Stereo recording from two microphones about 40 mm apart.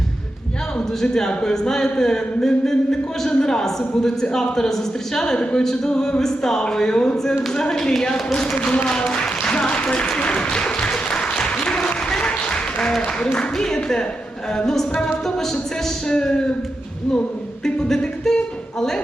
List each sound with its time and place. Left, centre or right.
0.8 s speech: centre
1.6 s a man's voice: centre
8.7 s applause: left
13.1 s a man's voice: left
16.0 s speech: centre
17.8 s music: centre